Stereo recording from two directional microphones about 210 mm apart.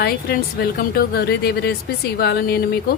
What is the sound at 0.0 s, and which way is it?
A woman's voice, 45° left (ahead or behind).